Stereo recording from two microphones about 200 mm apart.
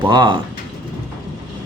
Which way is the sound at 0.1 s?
20° right (ahead or behind).